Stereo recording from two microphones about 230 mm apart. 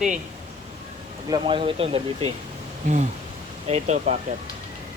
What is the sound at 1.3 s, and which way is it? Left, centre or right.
Speech, right.